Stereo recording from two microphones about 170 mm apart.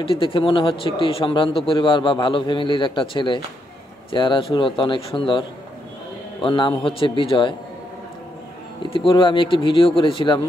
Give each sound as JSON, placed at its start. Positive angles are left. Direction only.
{"t": 0.0, "sound": "a man's voice", "side_deg": 30}
{"t": 6.4, "sound": "a man's voice", "side_deg": 30}
{"t": 8.9, "sound": "a man's voice", "side_deg": 30}